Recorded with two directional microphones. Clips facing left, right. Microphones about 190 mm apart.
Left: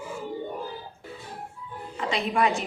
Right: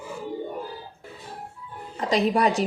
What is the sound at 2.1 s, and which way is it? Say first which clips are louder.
Speech: right 4 dB; 40° right (ahead or behind).